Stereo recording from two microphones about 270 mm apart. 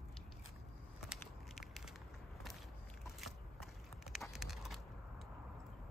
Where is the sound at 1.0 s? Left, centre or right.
Centre.